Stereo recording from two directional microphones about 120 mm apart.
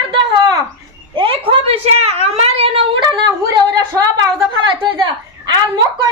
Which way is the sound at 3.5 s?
30° right (ahead or behind).